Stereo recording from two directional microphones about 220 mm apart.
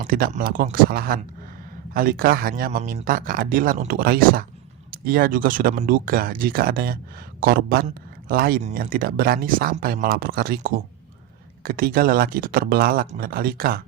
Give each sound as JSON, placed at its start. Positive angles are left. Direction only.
{"t": 0.0, "sound": "speech", "side_deg": -40}